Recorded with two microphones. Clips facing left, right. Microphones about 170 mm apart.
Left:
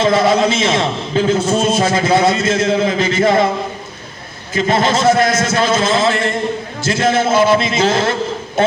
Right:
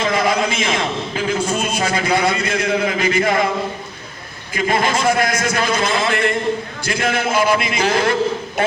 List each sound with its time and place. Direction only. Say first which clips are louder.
0.0 s a man's voice: left 5 dB; 25° left (ahead or behind)
4.5 s a man's voice: left 4 dB; 25° left (ahead or behind)